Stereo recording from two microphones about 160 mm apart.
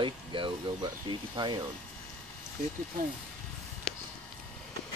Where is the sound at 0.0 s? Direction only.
30° right (ahead or behind).